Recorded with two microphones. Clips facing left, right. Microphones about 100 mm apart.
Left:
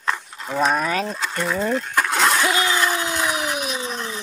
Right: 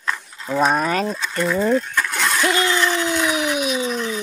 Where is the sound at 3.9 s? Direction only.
30° left (ahead or behind).